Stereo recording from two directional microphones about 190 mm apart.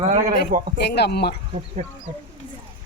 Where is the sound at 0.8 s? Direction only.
60° left (ahead or behind).